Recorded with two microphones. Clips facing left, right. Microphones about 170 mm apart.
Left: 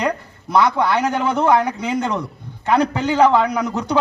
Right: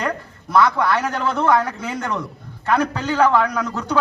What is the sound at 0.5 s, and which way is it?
A man's voice, 20° left (ahead or behind).